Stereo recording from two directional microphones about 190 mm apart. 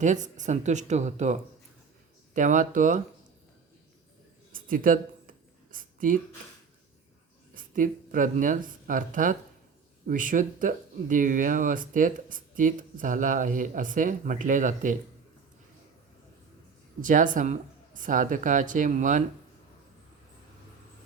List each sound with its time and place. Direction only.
0.0 s speech: 40° right (ahead or behind)
4.5 s a sound: 45° right (ahead or behind)
7.5 s speech: 45° right (ahead or behind)
17.0 s speech: 45° right (ahead or behind)